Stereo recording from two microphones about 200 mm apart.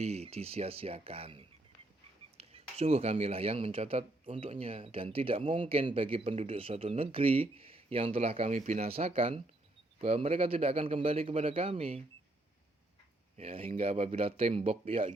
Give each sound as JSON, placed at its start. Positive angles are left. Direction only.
{"t": 0.0, "sound": "speech", "side_deg": -30}
{"t": 13.3, "sound": "speech", "side_deg": -30}